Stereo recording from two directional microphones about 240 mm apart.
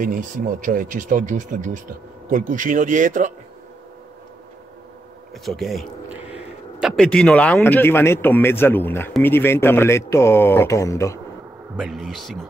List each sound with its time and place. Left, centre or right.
0.0 s speech: right
5.3 s a man's voice: centre
11.7 s speech: centre